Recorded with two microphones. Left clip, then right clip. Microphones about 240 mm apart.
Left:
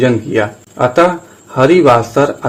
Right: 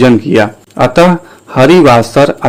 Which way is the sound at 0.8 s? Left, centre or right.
Right.